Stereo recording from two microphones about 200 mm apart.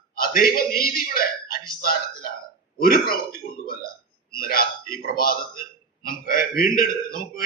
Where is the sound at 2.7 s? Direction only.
45° left (ahead or behind).